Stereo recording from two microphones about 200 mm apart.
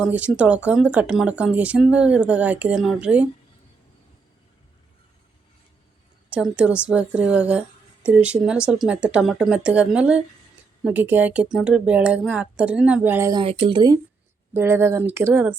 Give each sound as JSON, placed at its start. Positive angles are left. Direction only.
{"t": 0.0, "sound": "speech", "side_deg": -5}
{"t": 6.3, "sound": "speech", "side_deg": -5}
{"t": 13.4, "sound": "speech", "side_deg": -25}